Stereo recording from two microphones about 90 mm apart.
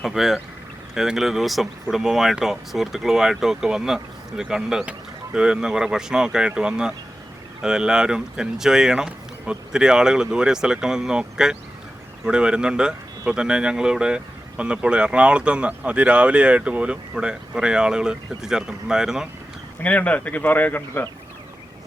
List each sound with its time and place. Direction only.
0.0 s speech: centre (ahead or behind)
19.8 s speech: 15° left (ahead or behind)